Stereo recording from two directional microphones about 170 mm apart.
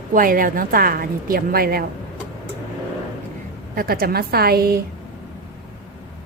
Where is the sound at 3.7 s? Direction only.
60° right (ahead or behind).